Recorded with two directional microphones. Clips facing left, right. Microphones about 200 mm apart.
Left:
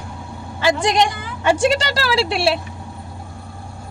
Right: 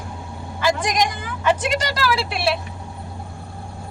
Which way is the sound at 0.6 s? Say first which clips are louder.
Left 3 dB; 30° left (ahead or behind).